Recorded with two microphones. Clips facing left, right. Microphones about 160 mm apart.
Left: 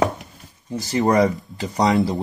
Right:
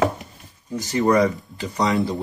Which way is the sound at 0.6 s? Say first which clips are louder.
Even; 35° left (ahead or behind).